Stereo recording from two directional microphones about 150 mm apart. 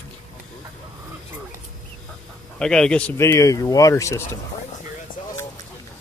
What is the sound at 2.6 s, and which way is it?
Speech, 5° left (ahead or behind).